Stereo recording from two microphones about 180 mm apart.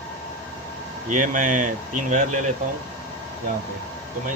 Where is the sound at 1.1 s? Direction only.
45° right (ahead or behind).